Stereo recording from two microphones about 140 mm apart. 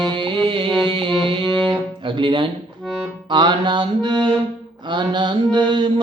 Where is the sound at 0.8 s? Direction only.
40° right (ahead or behind).